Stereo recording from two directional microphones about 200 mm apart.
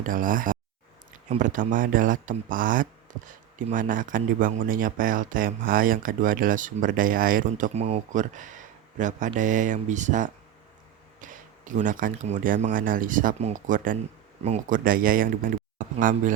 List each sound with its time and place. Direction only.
0.0 s speech: 45° right (ahead or behind)